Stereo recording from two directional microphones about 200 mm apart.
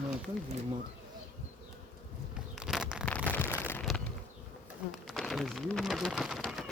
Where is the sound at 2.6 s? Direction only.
5° right (ahead or behind).